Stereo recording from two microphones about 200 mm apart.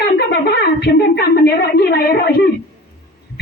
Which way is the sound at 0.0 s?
55° left (ahead or behind).